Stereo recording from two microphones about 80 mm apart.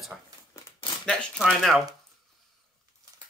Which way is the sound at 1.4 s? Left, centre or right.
Centre.